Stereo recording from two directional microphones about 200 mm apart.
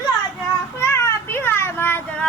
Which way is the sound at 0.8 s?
15° left (ahead or behind).